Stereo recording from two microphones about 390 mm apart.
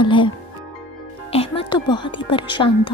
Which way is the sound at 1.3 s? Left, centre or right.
Centre.